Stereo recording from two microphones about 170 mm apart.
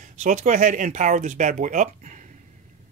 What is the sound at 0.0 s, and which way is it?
Speech, 50° right (ahead or behind).